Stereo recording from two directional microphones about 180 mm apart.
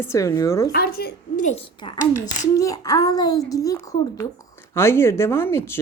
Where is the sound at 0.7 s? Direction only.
60° left (ahead or behind).